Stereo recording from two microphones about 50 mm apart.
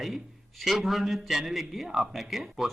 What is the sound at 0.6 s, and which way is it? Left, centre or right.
A man's voice, centre.